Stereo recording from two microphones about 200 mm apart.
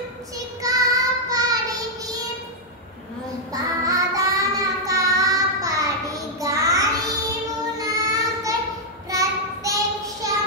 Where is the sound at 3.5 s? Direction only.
15° right (ahead or behind).